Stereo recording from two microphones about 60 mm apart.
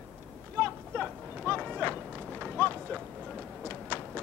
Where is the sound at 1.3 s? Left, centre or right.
Centre.